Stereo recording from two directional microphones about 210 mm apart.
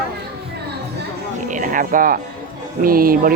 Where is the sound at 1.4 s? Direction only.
40° right (ahead or behind).